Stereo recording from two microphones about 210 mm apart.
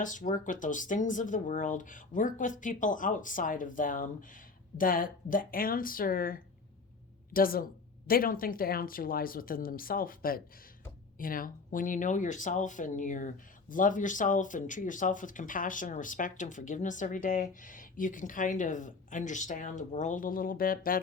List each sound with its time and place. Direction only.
0.0 s speech: 35° left (ahead or behind)